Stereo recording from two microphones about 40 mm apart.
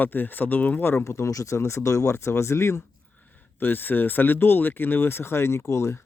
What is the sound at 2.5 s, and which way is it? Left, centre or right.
Speech, left.